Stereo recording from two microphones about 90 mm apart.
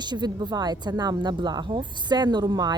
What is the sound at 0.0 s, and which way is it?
Speech, 55° right (ahead or behind).